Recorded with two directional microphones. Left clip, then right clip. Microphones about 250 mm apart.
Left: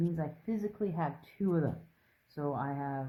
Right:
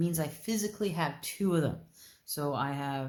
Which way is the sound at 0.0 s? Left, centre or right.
Right.